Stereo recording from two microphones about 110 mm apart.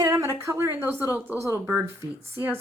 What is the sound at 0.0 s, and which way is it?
Speech, 25° right (ahead or behind).